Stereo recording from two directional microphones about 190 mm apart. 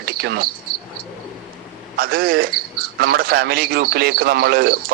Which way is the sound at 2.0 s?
50° right (ahead or behind).